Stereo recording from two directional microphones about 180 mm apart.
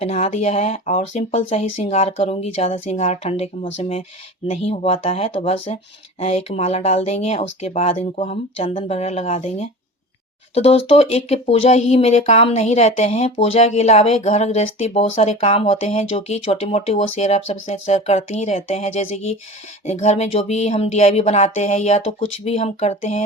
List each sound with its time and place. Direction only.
0.0 s speech: 35° left (ahead or behind)